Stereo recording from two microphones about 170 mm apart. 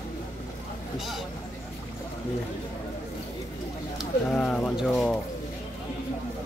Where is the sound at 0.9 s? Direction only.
Centre (ahead or behind).